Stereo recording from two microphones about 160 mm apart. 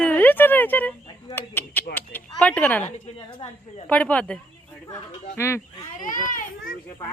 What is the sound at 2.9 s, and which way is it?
Speech, 40° left (ahead or behind).